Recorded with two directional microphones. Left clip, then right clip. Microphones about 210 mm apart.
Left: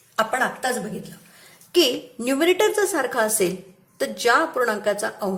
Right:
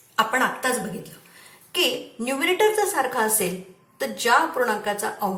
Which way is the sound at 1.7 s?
45° left (ahead or behind).